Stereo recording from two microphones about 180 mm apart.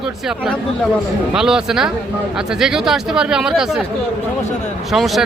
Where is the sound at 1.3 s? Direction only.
5° right (ahead or behind).